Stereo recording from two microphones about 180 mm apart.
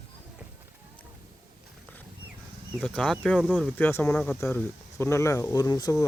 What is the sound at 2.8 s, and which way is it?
Speech, 5° left (ahead or behind).